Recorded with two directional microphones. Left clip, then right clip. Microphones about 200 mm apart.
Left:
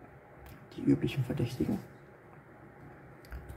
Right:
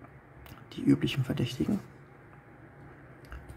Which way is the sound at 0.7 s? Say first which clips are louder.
Right 3 dB; 20° right (ahead or behind).